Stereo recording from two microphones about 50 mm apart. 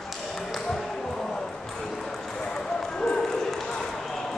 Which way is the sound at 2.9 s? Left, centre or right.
Centre.